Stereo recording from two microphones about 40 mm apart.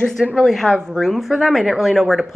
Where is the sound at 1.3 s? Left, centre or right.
Centre.